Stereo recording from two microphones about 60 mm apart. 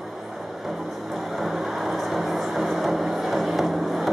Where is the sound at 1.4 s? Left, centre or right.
Centre.